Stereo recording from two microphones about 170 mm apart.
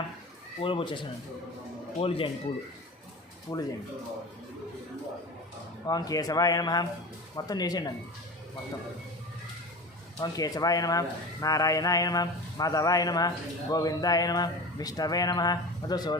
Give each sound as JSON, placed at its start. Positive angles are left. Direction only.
{"t": 0.6, "sound": "speech", "side_deg": 30}
{"t": 2.0, "sound": "speech", "side_deg": 35}
{"t": 3.5, "sound": "speech", "side_deg": 20}
{"t": 5.8, "sound": "speech", "side_deg": 20}
{"t": 10.2, "sound": "speech", "side_deg": 20}